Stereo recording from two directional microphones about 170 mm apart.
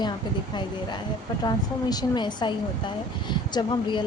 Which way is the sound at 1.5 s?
25° left (ahead or behind).